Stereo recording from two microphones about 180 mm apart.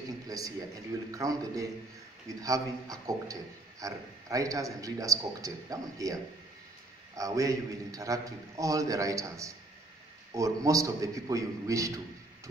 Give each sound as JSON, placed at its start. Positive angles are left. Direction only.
{"t": 0.3, "sound": "a man's voice", "side_deg": -20}
{"t": 7.2, "sound": "a man's voice", "side_deg": -20}